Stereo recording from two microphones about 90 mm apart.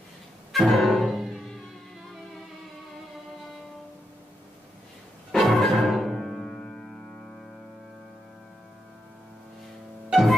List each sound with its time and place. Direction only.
0.5 s music: centre (ahead or behind)
5.3 s music: centre (ahead or behind)